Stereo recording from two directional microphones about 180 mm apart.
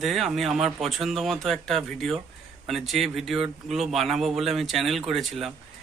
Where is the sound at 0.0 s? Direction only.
Centre (ahead or behind).